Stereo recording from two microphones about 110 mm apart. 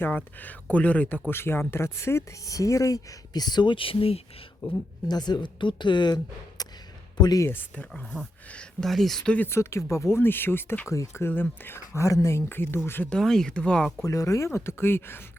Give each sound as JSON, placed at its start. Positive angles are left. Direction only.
{"t": 0.0, "sound": "speech", "side_deg": 15}
{"t": 4.6, "sound": "speech", "side_deg": 40}
{"t": 6.6, "sound": "a sound", "side_deg": 35}
{"t": 7.2, "sound": "speech", "side_deg": 40}
{"t": 7.4, "sound": "speech", "side_deg": 15}
{"t": 9.5, "sound": "speech", "side_deg": 25}
{"t": 13.1, "sound": "speech", "side_deg": 5}
{"t": 14.0, "sound": "speech", "side_deg": 30}